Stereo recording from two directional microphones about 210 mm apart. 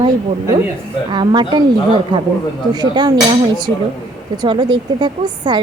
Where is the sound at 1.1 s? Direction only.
20° right (ahead or behind).